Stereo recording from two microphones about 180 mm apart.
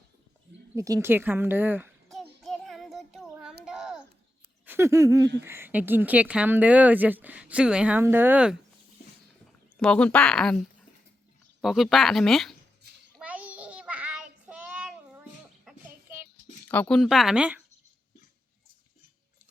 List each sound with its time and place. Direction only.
0.8 s a woman's voice: 15° right (ahead or behind)
2.0 s child singing: centre (ahead or behind)
3.3 s a sound: 5° right (ahead or behind)
5.4 s a woman's voice: 15° right (ahead or behind)
9.7 s speech: 5° left (ahead or behind)
11.6 s speech: centre (ahead or behind)
13.1 s child singing: 5° right (ahead or behind)
16.6 s speech: 10° left (ahead or behind)